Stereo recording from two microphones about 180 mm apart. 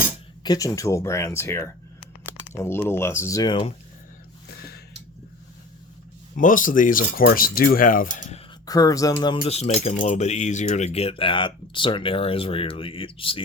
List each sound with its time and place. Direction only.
0.4 s speech: 20° left (ahead or behind)
6.3 s speech: 50° left (ahead or behind)
8.6 s speech: 20° left (ahead or behind)